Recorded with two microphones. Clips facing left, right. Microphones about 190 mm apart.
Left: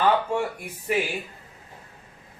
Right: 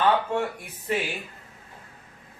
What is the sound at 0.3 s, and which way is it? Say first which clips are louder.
Speech: even; 10° left (ahead or behind).